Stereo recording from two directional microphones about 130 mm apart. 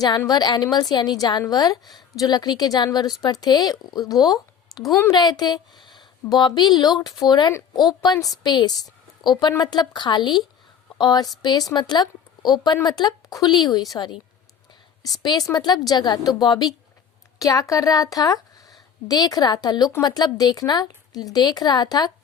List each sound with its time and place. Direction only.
0.3 s a woman's voice: 35° left (ahead or behind)